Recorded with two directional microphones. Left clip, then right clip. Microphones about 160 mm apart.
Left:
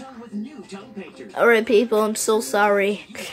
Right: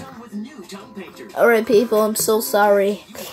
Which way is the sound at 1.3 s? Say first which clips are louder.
Right 2 dB; 15° right (ahead or behind).